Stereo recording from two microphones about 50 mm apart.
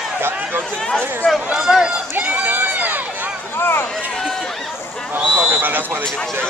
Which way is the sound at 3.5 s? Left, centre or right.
Left.